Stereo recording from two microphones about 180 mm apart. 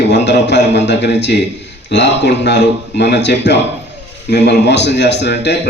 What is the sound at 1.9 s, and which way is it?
Speech, 70° left (ahead or behind).